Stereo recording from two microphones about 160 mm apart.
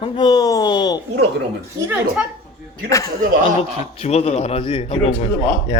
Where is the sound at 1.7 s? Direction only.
15° right (ahead or behind).